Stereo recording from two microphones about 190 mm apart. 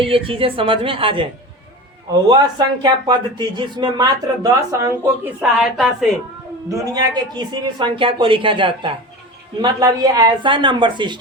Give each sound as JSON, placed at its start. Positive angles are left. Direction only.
{"t": 0.0, "sound": "speech", "side_deg": -30}
{"t": 6.7, "sound": "speech", "side_deg": -15}